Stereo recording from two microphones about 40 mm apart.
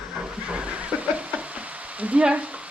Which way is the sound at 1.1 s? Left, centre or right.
Right.